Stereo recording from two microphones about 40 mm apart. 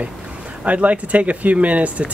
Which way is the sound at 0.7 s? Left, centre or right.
Right.